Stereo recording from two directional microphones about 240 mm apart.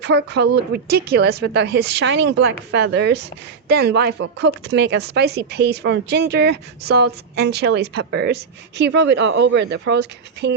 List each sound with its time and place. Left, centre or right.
0.0 s a woman's voice: right